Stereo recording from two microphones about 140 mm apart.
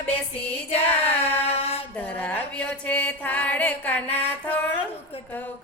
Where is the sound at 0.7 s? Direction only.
45° left (ahead or behind).